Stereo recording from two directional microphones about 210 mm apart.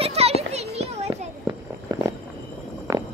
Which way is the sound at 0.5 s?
30° right (ahead or behind).